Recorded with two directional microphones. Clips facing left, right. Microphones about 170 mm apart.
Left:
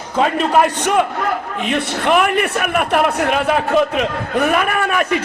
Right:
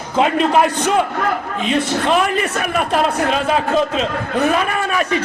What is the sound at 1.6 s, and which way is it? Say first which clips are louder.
A man's voice: right 1 dB; 60° left (ahead or behind).